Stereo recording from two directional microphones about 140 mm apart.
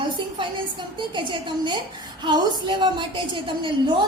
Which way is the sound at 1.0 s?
35° right (ahead or behind).